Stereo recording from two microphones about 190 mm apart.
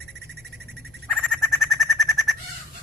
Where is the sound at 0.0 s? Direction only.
60° right (ahead or behind).